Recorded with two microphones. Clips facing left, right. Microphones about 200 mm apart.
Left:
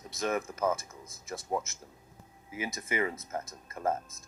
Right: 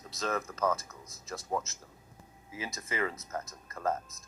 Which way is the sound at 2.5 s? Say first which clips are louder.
Left 3 dB; 20° left (ahead or behind).